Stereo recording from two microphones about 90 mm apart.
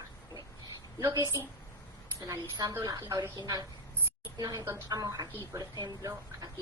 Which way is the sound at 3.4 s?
50° right (ahead or behind).